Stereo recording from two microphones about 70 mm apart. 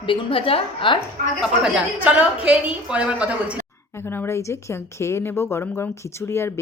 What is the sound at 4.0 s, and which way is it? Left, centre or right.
Speech, left.